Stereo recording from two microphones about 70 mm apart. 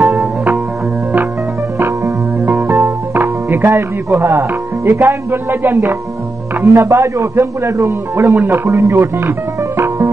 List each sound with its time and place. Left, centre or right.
1.8 s music: right
3.6 s a man's voice: right